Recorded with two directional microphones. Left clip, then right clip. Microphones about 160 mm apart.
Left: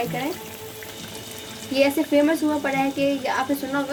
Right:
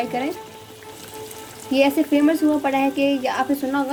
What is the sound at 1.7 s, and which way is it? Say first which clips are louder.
Speech: right 1 dB; 60° right (ahead or behind).